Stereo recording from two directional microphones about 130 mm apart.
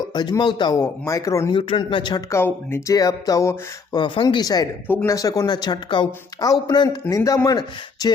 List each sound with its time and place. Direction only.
0.1 s speech: 35° left (ahead or behind)
0.8 s speech: 25° left (ahead or behind)
1.5 s speech: 40° left (ahead or behind)
2.3 s speech: 20° left (ahead or behind)
3.9 s speech: 40° left (ahead or behind)
4.9 s speech: 15° left (ahead or behind)
5.1 s speech: 25° left (ahead or behind)